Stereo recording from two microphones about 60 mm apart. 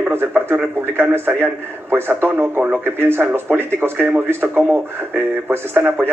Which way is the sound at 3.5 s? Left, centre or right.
Centre.